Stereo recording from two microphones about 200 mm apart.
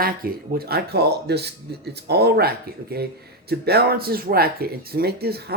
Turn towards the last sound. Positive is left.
turn(degrees=-50)  # may be behind; listen again after turning